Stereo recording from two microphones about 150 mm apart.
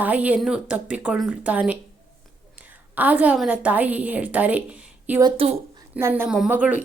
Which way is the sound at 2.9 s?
10° right (ahead or behind).